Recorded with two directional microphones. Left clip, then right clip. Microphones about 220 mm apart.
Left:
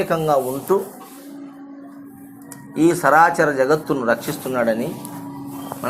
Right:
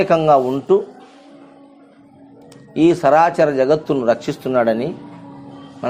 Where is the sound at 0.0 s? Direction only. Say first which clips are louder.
Right 5 dB; 40° right (ahead or behind).